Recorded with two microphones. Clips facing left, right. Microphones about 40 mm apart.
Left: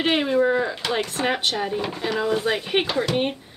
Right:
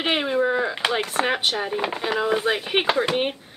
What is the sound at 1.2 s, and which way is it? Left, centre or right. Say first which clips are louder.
Speech: left 1 dB; centre.